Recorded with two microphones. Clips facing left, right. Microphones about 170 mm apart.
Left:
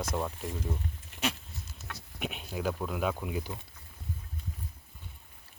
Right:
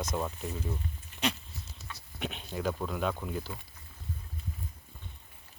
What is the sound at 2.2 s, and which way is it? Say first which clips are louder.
Speech: even; 5° left (ahead or behind).